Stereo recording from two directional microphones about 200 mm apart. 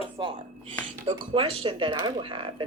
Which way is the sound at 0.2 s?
20° right (ahead or behind).